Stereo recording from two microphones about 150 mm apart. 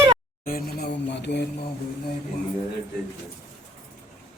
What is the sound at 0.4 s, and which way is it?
Speech, 75° left (ahead or behind).